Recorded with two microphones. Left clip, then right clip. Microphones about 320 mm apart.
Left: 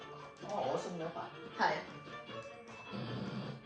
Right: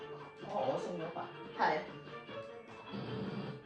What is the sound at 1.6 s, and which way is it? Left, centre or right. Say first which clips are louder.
Music: right 1 dB; left.